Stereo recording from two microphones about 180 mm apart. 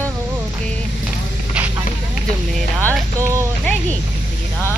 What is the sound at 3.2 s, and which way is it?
Speech, 15° right (ahead or behind).